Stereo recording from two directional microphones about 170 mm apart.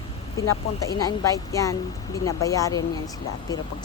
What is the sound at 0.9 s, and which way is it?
Speech, 20° left (ahead or behind).